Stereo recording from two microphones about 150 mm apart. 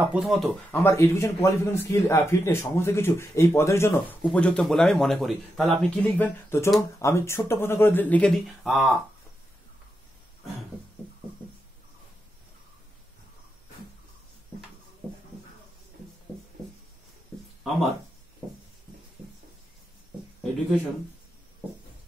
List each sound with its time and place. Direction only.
0.0 s speech: 5° right (ahead or behind)
0.7 s a man's voice: 20° left (ahead or behind)
4.3 s a man's voice: 5° left (ahead or behind)